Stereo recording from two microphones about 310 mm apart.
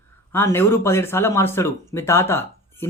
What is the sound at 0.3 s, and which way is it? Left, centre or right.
A man's voice, centre.